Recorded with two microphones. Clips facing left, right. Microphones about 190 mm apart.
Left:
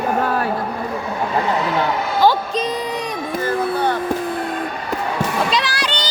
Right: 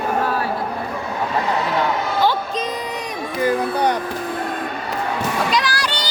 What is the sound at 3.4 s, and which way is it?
Music, 15° right (ahead or behind).